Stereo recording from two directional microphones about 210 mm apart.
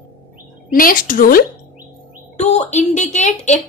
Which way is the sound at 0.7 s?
40° left (ahead or behind).